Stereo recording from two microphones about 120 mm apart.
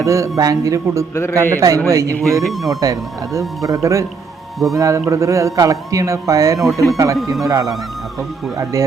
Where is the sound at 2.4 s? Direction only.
Centre (ahead or behind).